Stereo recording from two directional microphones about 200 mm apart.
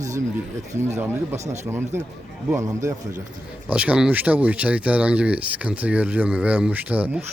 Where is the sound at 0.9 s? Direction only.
10° right (ahead or behind).